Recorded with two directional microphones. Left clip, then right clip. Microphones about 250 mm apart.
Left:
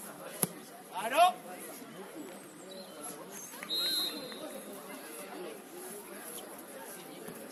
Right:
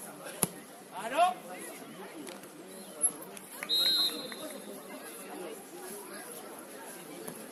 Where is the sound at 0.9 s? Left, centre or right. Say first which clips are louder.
Left 2 dB; left.